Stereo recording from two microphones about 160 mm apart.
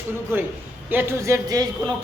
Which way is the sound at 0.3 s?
15° right (ahead or behind).